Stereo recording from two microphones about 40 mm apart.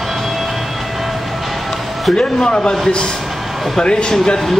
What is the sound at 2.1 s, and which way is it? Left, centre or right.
Speech, left.